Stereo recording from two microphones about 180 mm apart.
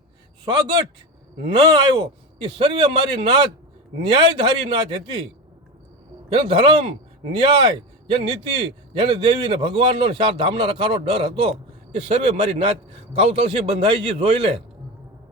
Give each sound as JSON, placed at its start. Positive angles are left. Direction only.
{"t": 1.7, "sound": "a man's voice", "side_deg": -25}
{"t": 6.3, "sound": "a man's voice", "side_deg": -30}